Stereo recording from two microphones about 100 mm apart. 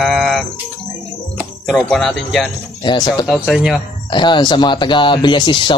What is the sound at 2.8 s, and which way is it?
Speech, 45° left (ahead or behind).